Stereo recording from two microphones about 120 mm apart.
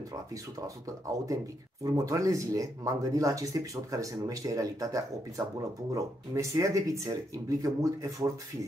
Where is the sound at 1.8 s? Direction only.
25° right (ahead or behind).